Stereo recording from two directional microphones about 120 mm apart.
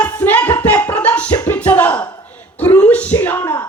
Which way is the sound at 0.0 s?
15° left (ahead or behind).